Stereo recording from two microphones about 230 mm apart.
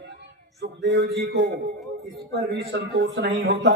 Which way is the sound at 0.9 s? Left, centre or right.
Right.